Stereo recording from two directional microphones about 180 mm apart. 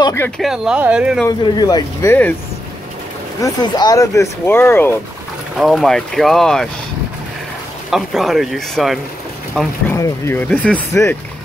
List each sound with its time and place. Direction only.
0.0 s speech: 15° left (ahead or behind)
0.4 s speech: 5° right (ahead or behind)
1.4 s speech: 25° left (ahead or behind)
3.3 s speech: 20° left (ahead or behind)
5.6 s speech: centre (ahead or behind)
7.9 s speech: centre (ahead or behind)
9.8 s speech: 15° left (ahead or behind)